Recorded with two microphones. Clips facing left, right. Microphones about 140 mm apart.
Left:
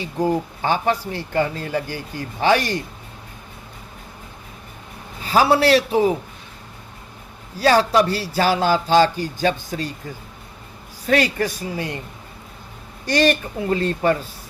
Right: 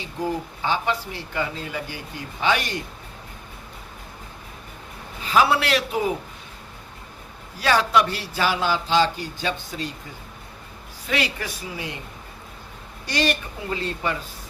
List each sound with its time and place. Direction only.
0.2 s speech: 45° left (ahead or behind)
5.2 s speech: 35° left (ahead or behind)
7.6 s speech: 35° left (ahead or behind)
11.0 s speech: 45° left (ahead or behind)
13.1 s speech: 50° left (ahead or behind)